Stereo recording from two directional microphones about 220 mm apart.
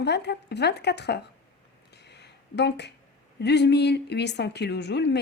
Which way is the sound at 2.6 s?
50° left (ahead or behind).